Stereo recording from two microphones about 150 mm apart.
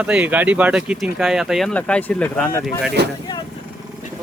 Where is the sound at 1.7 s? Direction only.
10° left (ahead or behind).